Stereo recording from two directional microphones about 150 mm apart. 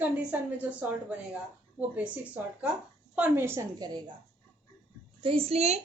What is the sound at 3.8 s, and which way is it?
Speech, 30° right (ahead or behind).